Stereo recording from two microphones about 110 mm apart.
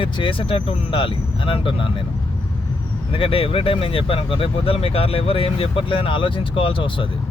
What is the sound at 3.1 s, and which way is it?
Speech, 55° left (ahead or behind).